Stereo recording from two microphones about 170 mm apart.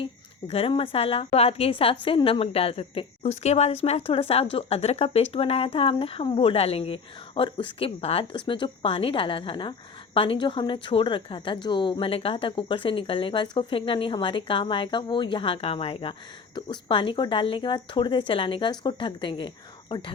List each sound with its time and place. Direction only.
0.0 s a woman's voice: 35° left (ahead or behind)